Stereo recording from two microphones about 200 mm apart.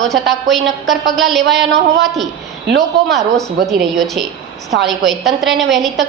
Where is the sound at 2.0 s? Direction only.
Centre (ahead or behind).